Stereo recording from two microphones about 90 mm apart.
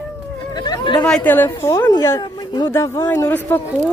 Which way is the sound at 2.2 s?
50° left (ahead or behind).